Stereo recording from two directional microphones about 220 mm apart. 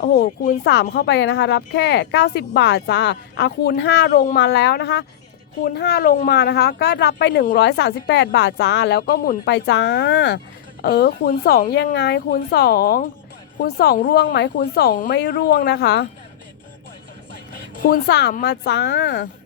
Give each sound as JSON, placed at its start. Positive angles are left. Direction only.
{"t": 0.0, "sound": "speech", "side_deg": 50}
{"t": 17.8, "sound": "speech", "side_deg": 45}